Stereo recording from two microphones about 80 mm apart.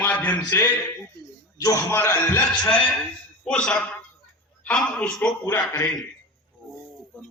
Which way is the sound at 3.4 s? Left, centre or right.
Centre.